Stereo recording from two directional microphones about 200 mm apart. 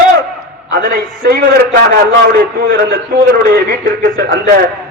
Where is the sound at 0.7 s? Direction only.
50° right (ahead or behind).